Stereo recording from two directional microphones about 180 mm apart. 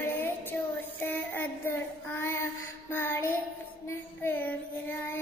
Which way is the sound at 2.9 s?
10° left (ahead or behind).